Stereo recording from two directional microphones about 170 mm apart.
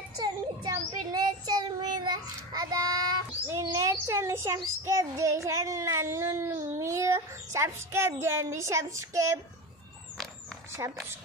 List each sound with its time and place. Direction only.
0.2 s child singing: 20° right (ahead or behind)
10.8 s speech: 20° right (ahead or behind)